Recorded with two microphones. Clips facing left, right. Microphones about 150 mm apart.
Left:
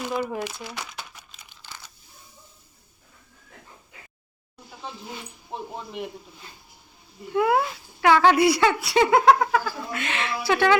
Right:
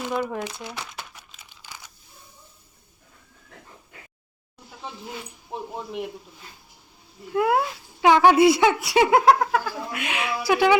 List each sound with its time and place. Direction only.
0.1 s speech: 5° left (ahead or behind)
1.6 s a sound: 15° right (ahead or behind)
7.3 s speech: centre (ahead or behind)
8.0 s speech: 15° right (ahead or behind)
9.0 s speech: 5° right (ahead or behind)